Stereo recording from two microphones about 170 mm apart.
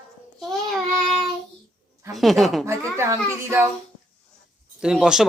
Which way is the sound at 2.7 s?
15° right (ahead or behind).